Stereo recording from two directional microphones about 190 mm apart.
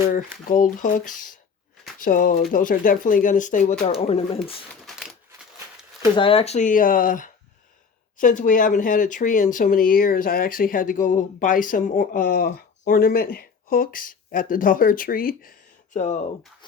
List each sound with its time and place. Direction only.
0.5 s speech: 45° left (ahead or behind)
4.7 s a sound: centre (ahead or behind)
6.1 s speech: 30° left (ahead or behind)